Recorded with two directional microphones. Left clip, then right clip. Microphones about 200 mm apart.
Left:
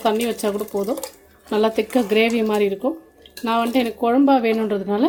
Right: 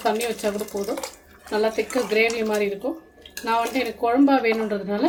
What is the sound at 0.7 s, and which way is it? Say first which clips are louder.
Speech: left 5 dB; 30° left (ahead or behind).